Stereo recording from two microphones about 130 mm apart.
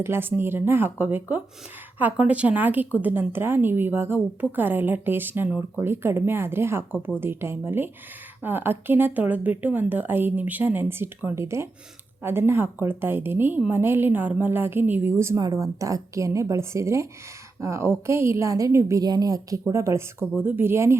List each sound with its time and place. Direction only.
0.0 s a woman's voice: 15° right (ahead or behind)